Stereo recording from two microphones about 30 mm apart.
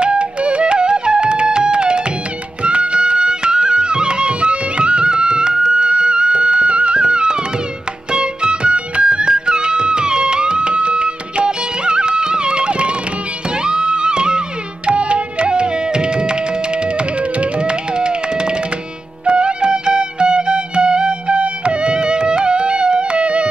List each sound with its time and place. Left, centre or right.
0.0 s music: right